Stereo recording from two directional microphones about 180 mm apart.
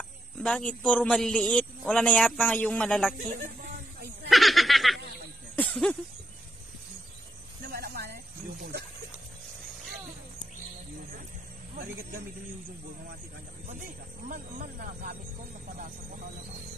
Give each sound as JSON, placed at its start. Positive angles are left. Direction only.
{"t": 0.4, "sound": "a man's voice", "side_deg": 5}
{"t": 3.2, "sound": "a sound", "side_deg": -55}
{"t": 4.3, "sound": "snicker", "side_deg": 0}
{"t": 5.6, "sound": "a sound", "side_deg": 5}
{"t": 7.7, "sound": "snake", "side_deg": -60}
{"t": 13.7, "sound": "speech", "side_deg": -45}